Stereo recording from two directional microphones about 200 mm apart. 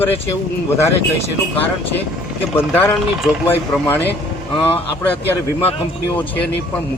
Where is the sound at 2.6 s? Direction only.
10° left (ahead or behind).